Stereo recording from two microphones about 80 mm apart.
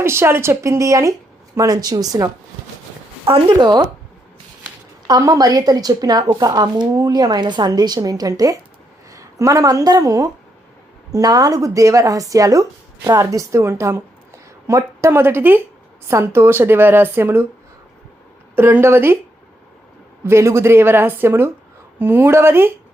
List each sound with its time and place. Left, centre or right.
0.0 s a woman's voice: right
3.2 s a woman's voice: right
5.0 s a woman's voice: right
7.7 s a woman's voice: right
18.5 s speech: right
20.2 s a woman's voice: right